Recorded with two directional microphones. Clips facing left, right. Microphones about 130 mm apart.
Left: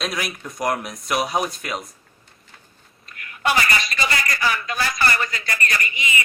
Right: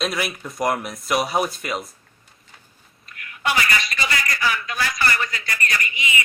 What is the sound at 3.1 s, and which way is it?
A man's voice, 40° left (ahead or behind).